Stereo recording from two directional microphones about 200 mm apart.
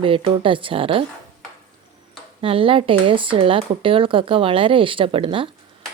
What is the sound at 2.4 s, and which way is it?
A woman's voice, 25° right (ahead or behind).